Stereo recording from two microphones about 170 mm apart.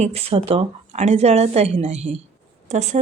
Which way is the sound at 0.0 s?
40° right (ahead or behind).